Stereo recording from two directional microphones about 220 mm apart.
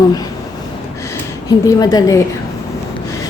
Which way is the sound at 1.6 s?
15° left (ahead or behind).